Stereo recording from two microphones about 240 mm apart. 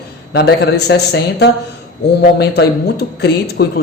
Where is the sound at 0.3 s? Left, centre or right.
Left.